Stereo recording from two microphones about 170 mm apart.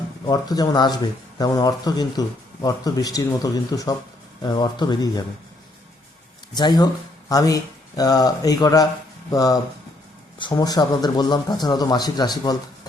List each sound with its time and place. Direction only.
0.3 s speech: 20° left (ahead or behind)
6.5 s speech: 25° left (ahead or behind)